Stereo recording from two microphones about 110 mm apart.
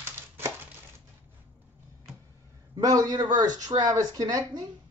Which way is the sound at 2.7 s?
35° right (ahead or behind).